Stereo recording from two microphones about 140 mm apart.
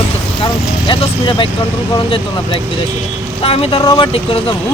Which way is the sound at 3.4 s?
45° left (ahead or behind).